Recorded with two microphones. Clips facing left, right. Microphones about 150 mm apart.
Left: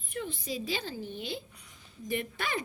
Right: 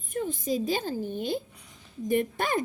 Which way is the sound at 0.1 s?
45° right (ahead or behind).